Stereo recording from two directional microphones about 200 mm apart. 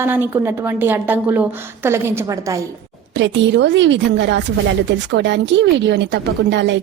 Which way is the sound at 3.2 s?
65° right (ahead or behind).